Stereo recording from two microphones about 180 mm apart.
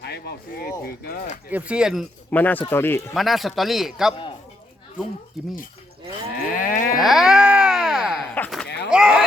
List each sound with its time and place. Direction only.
0.0 s speech: 65° left (ahead or behind)
0.8 s speech: 55° left (ahead or behind)
1.5 s speech: 10° right (ahead or behind)
2.3 s speech: 10° left (ahead or behind)
3.2 s speech: centre (ahead or behind)
5.4 s speech: centre (ahead or behind)
6.4 s moo: 50° left (ahead or behind)
7.0 s baby cry: centre (ahead or behind)
8.4 s livestock: 5° left (ahead or behind)
8.9 s a sound: 5° right (ahead or behind)